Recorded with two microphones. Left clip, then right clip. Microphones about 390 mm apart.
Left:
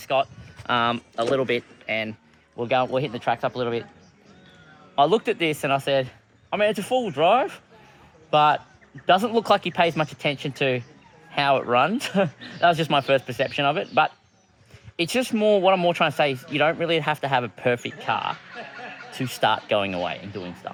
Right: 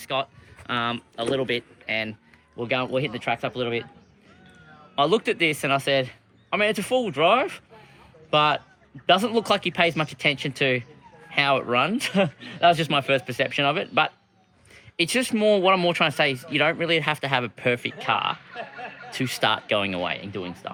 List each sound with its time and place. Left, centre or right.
0.0 s speech: centre
4.9 s speech: centre
18.5 s a sound: right
19.2 s speech: centre